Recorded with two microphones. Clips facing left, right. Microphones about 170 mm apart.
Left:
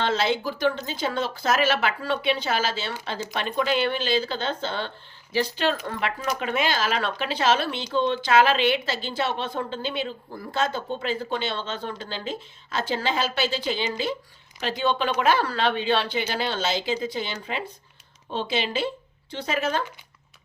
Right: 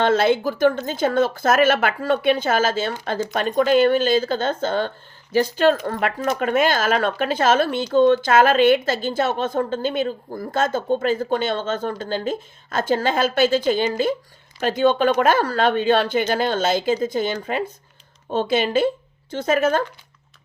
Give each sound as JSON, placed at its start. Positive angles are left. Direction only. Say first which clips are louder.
{"t": 0.0, "sound": "speech", "louder": "right 7 dB", "side_deg": -50}